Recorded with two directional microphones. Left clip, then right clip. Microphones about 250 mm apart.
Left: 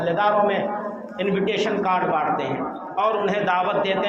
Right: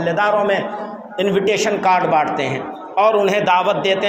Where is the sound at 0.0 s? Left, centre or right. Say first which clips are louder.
Right 3 dB; right.